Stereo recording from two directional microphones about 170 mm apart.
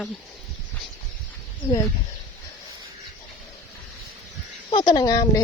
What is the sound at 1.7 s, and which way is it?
Speech, 20° left (ahead or behind).